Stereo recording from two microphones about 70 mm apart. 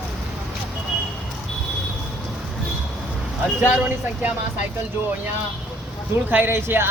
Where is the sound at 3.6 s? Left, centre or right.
Centre.